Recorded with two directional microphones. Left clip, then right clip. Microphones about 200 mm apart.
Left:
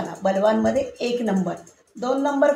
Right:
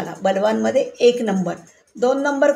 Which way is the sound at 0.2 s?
50° right (ahead or behind).